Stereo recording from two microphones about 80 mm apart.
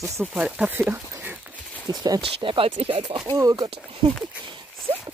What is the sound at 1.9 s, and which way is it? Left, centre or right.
Speech, right.